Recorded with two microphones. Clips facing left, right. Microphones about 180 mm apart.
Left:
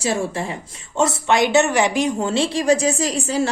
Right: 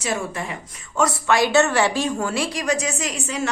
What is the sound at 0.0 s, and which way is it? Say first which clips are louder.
Speech: left 4 dB; 30° left (ahead or behind).